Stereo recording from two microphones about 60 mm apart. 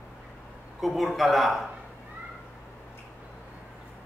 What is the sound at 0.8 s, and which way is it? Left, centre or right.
Speech, centre.